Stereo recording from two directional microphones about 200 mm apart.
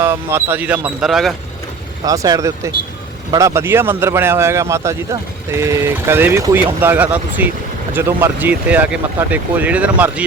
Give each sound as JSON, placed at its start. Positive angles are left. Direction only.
{"t": 0.0, "sound": "speech", "side_deg": -10}
{"t": 2.0, "sound": "speech", "side_deg": -20}